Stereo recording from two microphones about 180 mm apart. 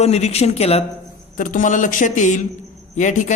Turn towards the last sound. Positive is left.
turn(degrees=45)  # may be behind; listen again after turning